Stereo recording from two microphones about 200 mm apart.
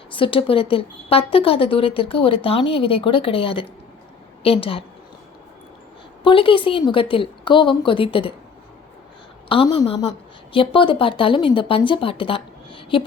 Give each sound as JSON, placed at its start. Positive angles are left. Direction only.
{"t": 0.1, "sound": "a woman's voice", "side_deg": 25}
{"t": 6.2, "sound": "a woman's voice", "side_deg": 25}
{"t": 9.5, "sound": "a woman's voice", "side_deg": 25}